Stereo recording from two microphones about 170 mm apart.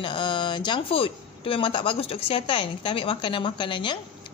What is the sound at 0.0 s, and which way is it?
Speech, 30° left (ahead or behind).